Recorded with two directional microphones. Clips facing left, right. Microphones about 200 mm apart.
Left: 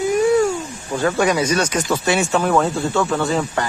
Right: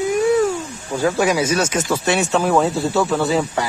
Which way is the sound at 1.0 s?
5° right (ahead or behind).